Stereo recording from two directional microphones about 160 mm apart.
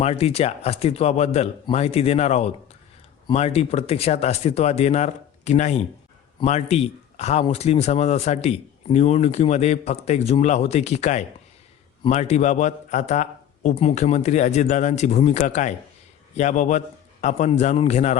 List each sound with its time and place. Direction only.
0.0 s speech: 40° left (ahead or behind)